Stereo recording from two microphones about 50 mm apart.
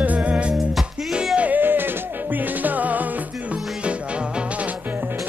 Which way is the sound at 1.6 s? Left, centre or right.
Right.